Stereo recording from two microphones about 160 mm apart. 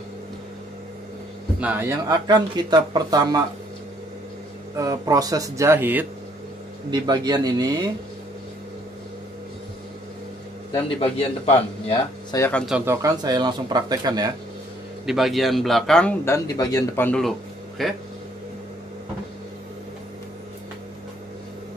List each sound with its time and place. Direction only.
1.6 s speech: 10° right (ahead or behind)
2.0 s speech: 25° right (ahead or behind)
4.7 s speech: 20° right (ahead or behind)
6.9 s speech: 25° right (ahead or behind)
10.7 s speech: 35° left (ahead or behind)
12.4 s speech: 10° left (ahead or behind)
12.8 s speech: 20° right (ahead or behind)
15.0 s a man's voice: centre (ahead or behind)
16.3 s a man's voice: 20° left (ahead or behind)
17.2 s a sound: centre (ahead or behind)